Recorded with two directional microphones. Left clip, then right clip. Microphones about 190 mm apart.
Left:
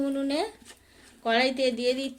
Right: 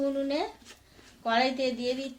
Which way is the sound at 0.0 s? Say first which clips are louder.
Left 1 dB; 40° left (ahead or behind).